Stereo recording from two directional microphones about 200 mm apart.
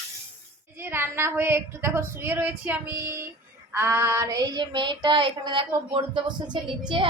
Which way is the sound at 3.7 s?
15° right (ahead or behind).